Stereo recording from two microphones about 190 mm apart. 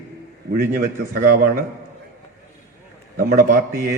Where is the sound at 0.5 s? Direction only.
45° right (ahead or behind).